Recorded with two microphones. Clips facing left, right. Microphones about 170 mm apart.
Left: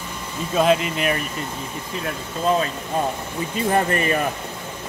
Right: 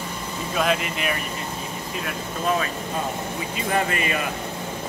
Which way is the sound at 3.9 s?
40° left (ahead or behind).